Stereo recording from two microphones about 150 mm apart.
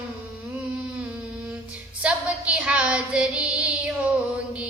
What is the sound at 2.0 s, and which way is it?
Child singing, 10° right (ahead or behind).